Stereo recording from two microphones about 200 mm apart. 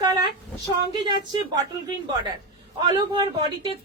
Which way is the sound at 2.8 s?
20° right (ahead or behind).